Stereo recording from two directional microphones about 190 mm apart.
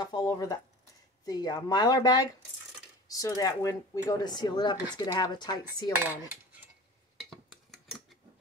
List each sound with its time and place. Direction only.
0.0 s speech: 20° left (ahead or behind)
7.2 s cutlery: centre (ahead or behind)